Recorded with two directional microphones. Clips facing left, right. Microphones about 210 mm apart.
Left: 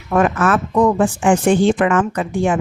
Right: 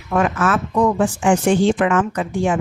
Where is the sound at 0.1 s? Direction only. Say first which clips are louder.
Left 3 dB; 50° left (ahead or behind).